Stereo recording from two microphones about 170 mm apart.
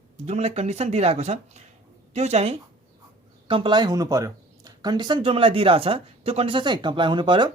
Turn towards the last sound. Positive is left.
turn(degrees=-25)  # may be behind; listen again after turning